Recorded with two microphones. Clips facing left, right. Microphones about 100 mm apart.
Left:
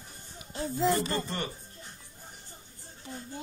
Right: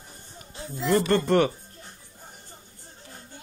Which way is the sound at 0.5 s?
40° left (ahead or behind).